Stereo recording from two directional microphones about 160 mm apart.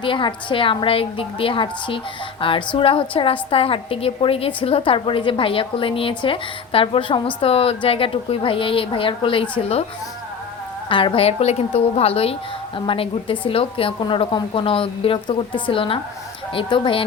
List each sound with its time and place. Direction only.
0.0 s a woman's voice: 30° left (ahead or behind)
10.8 s a woman's voice: 30° left (ahead or behind)